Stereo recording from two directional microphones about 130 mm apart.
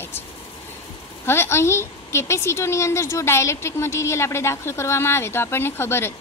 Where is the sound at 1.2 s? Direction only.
20° left (ahead or behind).